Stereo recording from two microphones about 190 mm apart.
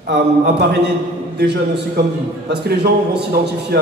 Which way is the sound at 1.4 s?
60° right (ahead or behind).